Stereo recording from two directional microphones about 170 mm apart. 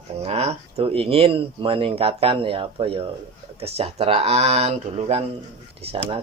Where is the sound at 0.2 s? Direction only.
35° right (ahead or behind).